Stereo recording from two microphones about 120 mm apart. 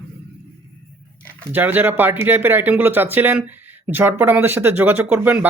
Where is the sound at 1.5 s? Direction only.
15° right (ahead or behind).